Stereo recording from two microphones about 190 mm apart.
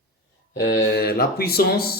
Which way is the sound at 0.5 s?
55° left (ahead or behind).